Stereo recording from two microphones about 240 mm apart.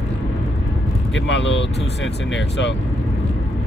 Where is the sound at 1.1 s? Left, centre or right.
Left.